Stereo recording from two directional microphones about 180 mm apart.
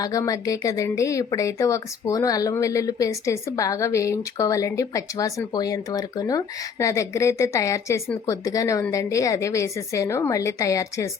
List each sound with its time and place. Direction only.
0.0 s speech: 20° left (ahead or behind)